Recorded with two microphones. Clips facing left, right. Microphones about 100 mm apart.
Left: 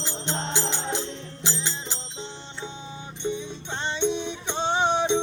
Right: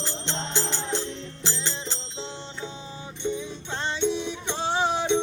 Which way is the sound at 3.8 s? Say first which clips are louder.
Even; 25° left (ahead or behind).